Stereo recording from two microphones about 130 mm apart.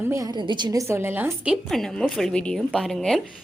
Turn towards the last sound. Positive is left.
turn(degrees=5)  # may be behind; listen again after turning